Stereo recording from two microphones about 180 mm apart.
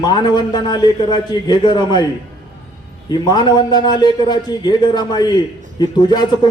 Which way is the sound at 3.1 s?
20° left (ahead or behind).